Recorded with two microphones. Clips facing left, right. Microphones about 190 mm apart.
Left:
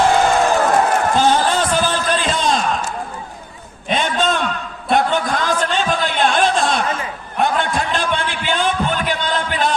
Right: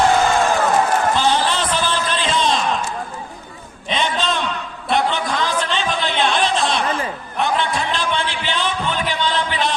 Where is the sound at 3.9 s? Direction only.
50° left (ahead or behind).